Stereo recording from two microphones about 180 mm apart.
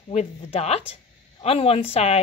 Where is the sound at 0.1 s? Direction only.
35° left (ahead or behind).